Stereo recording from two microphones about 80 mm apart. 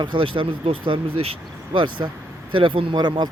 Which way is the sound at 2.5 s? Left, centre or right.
Right.